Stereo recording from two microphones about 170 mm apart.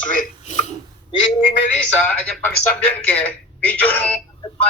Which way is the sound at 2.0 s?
10° left (ahead or behind).